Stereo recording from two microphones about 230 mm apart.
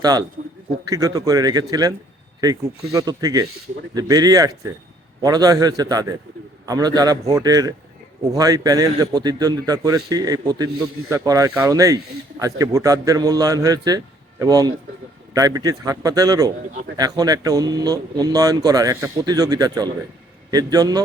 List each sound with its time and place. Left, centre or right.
0.0 s speech: centre
2.9 s speech: centre